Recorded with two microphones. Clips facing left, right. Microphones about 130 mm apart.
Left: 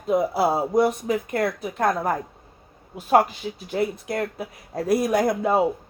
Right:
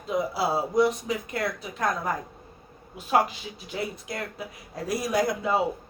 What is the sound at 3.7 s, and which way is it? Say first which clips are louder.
Speech: left 7 dB; 50° left (ahead or behind).